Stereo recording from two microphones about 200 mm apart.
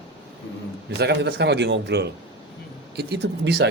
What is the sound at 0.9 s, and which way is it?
Speech, 55° right (ahead or behind).